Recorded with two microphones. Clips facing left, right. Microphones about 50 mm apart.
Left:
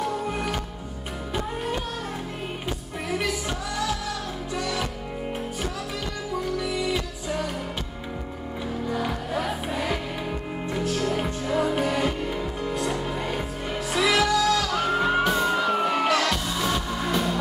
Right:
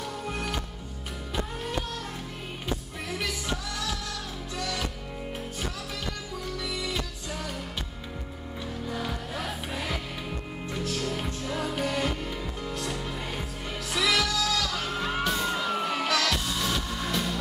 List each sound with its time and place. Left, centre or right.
0.0 s music: centre
3.1 s music: centre
6.6 s music: centre
8.9 s music: centre
16.3 s music: centre